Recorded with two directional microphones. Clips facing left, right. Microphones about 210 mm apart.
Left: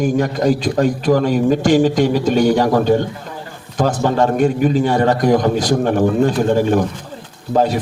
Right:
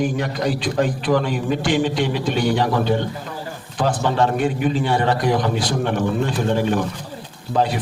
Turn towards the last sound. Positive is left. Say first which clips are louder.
# left 4 dB
turn(degrees=45)  # may be behind; listen again after turning